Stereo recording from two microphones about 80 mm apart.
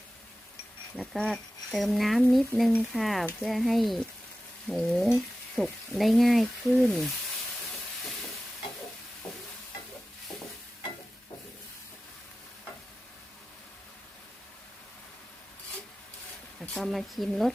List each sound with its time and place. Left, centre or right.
1.1 s speech: centre
5.1 s stir: centre
6.0 s speech: centre
16.6 s speech: centre